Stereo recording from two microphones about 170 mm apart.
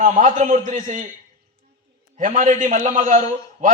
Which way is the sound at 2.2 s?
45° right (ahead or behind).